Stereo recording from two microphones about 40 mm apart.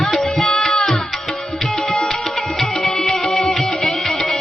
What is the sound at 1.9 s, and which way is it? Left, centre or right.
Music, centre.